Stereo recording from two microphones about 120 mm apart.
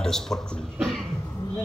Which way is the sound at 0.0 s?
5° left (ahead or behind).